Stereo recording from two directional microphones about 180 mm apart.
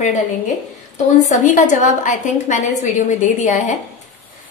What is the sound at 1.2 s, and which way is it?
A woman's voice, 40° left (ahead or behind).